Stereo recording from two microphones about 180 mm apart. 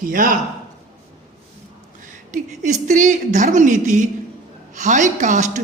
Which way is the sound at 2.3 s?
40° right (ahead or behind).